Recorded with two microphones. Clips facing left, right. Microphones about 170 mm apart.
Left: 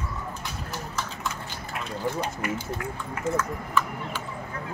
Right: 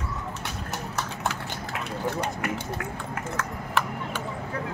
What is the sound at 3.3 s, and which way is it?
Speech, 70° right (ahead or behind).